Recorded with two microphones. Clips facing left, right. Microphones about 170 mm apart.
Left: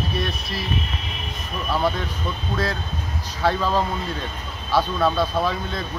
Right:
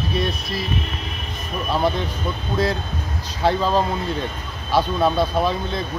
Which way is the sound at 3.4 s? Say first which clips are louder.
Right 2 dB; 20° right (ahead or behind).